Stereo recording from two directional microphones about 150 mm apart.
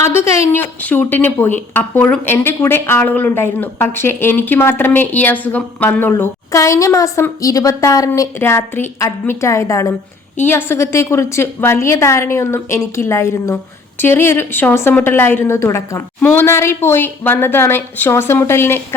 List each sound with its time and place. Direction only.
0.0 s a woman's voice: 15° left (ahead or behind)